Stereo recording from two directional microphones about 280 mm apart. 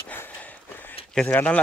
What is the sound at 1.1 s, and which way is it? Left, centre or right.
Speech, centre.